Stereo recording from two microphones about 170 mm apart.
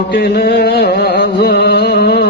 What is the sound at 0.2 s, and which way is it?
Music, 75° left (ahead or behind).